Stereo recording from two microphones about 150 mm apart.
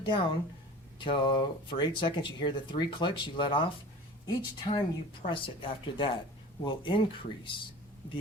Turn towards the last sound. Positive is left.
turn(degrees=35)  # may be behind; listen again after turning